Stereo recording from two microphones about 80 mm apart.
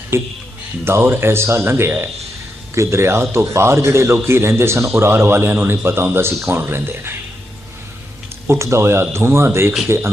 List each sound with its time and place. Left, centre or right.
0.1 s a man's voice: right
8.4 s a man's voice: right